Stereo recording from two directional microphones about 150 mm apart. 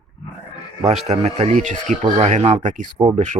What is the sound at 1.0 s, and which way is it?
Speech, 45° right (ahead or behind).